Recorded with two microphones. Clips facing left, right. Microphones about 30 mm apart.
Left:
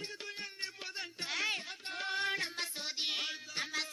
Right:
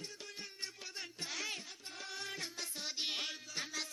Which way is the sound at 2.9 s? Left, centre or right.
Centre.